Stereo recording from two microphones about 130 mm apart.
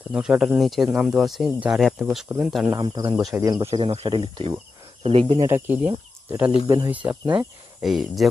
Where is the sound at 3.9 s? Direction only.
45° right (ahead or behind).